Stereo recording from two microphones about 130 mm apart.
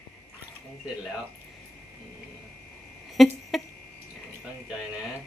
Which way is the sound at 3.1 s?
Centre (ahead or behind).